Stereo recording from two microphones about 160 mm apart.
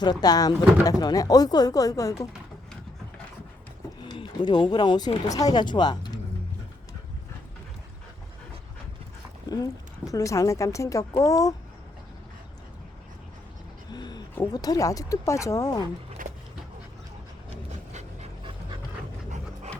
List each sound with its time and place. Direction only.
0.0 s speech: 25° left (ahead or behind)
4.0 s speech: 30° left (ahead or behind)
10.1 s speech: 20° left (ahead or behind)
13.9 s a sound: 25° left (ahead or behind)
14.3 s speech: 25° left (ahead or behind)
16.2 s dog: 60° right (ahead or behind)
17.9 s dog: 40° right (ahead or behind)